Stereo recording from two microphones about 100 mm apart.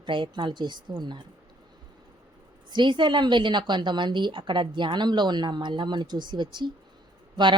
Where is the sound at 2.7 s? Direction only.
50° right (ahead or behind).